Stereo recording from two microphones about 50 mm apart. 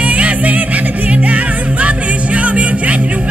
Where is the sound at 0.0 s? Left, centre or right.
Right.